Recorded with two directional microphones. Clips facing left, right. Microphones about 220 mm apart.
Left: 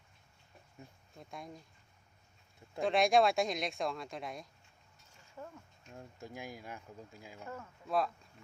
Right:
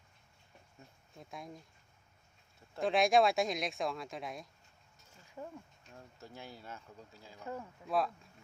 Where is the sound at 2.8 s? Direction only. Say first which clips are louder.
Even; centre (ahead or behind).